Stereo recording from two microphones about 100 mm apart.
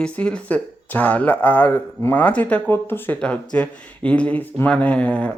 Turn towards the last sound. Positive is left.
turn(degrees=10)  # may be behind; listen again after turning